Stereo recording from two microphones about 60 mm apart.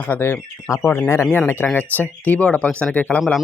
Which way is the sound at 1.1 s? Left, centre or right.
Left.